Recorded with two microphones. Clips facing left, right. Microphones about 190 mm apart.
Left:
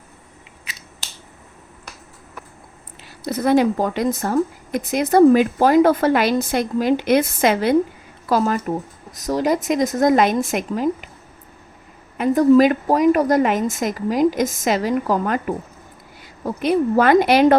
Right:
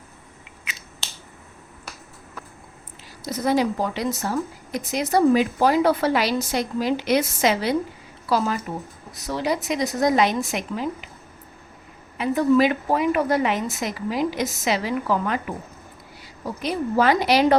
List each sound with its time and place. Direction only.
0.6 s scissors: 35° left (ahead or behind)
3.2 s speech: 60° left (ahead or behind)
12.1 s speech: 45° left (ahead or behind)
16.2 s a woman's voice: 55° left (ahead or behind)